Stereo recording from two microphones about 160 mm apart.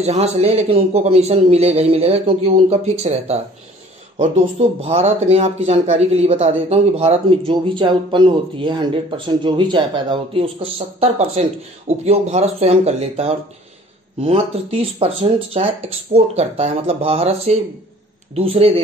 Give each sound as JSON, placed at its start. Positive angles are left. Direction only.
{"t": 0.0, "sound": "speech", "side_deg": -40}